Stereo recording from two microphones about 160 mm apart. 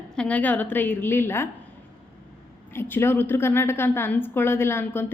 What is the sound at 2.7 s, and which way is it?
A woman's voice, 15° left (ahead or behind).